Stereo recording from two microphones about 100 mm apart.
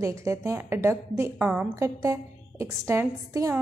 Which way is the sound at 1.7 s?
30° right (ahead or behind).